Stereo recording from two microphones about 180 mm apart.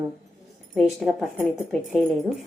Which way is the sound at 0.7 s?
Centre (ahead or behind).